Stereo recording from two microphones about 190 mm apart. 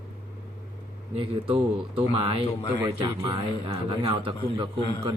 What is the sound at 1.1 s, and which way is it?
A man's voice, 30° right (ahead or behind).